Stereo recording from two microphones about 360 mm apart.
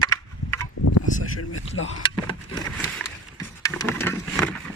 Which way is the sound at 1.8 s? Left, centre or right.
Left.